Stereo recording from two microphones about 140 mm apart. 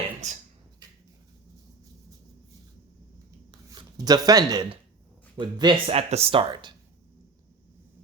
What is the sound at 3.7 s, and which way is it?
Speech, 30° right (ahead or behind).